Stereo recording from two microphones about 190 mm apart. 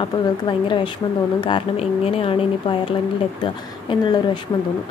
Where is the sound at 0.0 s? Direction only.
25° left (ahead or behind).